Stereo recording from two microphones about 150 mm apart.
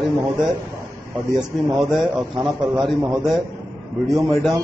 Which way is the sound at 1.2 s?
25° right (ahead or behind).